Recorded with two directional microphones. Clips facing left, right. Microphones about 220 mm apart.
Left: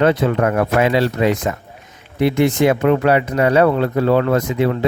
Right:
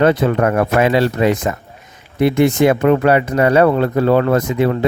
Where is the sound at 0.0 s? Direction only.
45° right (ahead or behind).